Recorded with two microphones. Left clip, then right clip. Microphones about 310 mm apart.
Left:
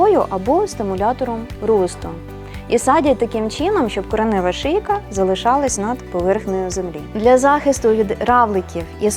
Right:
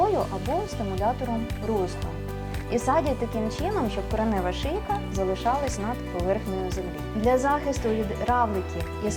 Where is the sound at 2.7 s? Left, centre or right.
Left.